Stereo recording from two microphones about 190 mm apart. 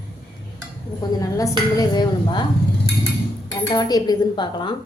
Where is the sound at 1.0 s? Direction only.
20° left (ahead or behind).